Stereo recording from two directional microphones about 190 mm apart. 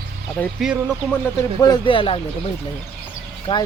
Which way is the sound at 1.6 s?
25° left (ahead or behind).